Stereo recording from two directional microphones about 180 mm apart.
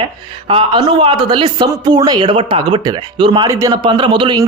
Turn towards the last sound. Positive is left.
turn(degrees=-30)  # may be behind; listen again after turning